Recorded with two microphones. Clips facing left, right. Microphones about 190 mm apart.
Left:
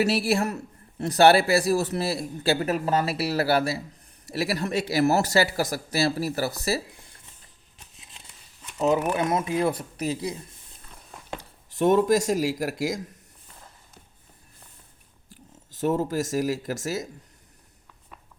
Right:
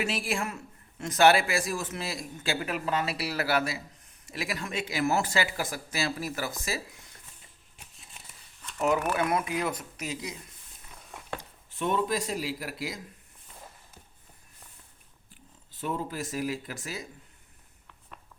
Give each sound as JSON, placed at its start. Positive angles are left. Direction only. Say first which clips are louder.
{"t": 0.0, "sound": "speech", "louder": "left 8 dB", "side_deg": 40}
{"t": 8.8, "sound": "speech", "louder": "left 4 dB", "side_deg": 20}
{"t": 11.3, "sound": "speech", "louder": "left 9 dB", "side_deg": 40}
{"t": 15.8, "sound": "speech", "louder": "left 9 dB", "side_deg": 45}